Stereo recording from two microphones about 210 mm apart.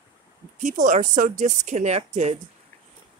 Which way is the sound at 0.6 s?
40° right (ahead or behind).